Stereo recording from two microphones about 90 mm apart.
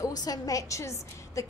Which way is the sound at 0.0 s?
45° left (ahead or behind).